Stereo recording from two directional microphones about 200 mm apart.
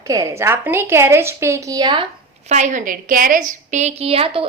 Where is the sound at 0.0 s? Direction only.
15° right (ahead or behind).